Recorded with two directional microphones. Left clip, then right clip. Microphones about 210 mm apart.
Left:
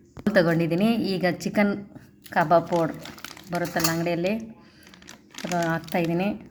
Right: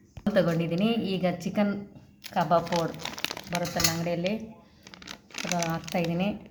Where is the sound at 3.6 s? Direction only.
20° left (ahead or behind).